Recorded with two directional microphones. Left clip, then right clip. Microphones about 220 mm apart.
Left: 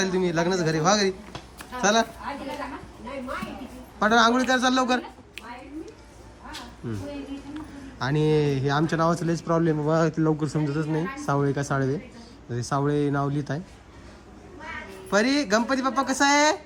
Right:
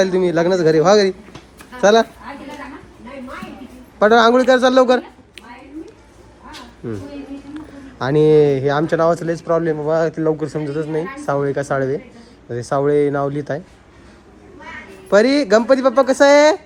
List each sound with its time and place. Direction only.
0.0 s speech: 10° left (ahead or behind)
4.0 s speech: 15° left (ahead or behind)
7.5 s speech: 10° left (ahead or behind)
15.1 s speech: 10° left (ahead or behind)